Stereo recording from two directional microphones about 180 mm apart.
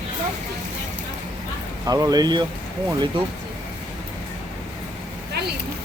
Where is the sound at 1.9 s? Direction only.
20° right (ahead or behind).